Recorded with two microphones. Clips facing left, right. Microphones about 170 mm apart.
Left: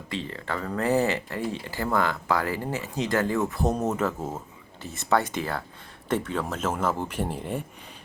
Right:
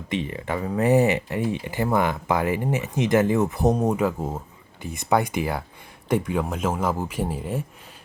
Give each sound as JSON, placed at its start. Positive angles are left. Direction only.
{"t": 0.1, "sound": "speech", "side_deg": -15}